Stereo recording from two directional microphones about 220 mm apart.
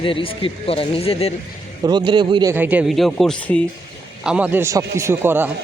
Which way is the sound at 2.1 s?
20° right (ahead or behind).